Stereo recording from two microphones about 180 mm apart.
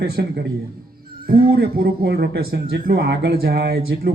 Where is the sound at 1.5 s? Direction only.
60° right (ahead or behind).